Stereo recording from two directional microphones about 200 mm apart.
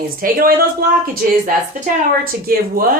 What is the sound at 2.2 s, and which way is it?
Speech, 45° right (ahead or behind).